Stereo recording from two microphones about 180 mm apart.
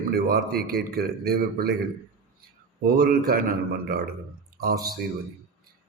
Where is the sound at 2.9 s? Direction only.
55° right (ahead or behind).